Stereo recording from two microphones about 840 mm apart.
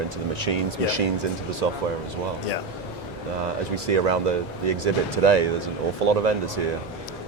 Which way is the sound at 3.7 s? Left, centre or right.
Right.